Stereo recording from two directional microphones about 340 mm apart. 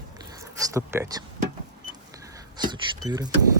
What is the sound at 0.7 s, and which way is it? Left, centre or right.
Speech, centre.